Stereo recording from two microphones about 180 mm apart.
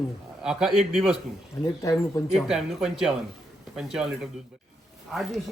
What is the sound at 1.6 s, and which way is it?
Speech, 20° left (ahead or behind).